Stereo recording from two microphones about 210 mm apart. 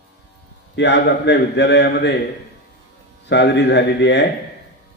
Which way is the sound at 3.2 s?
55° left (ahead or behind).